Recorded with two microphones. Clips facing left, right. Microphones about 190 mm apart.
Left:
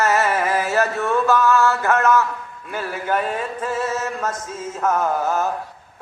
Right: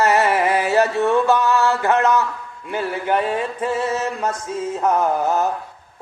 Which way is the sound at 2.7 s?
20° right (ahead or behind).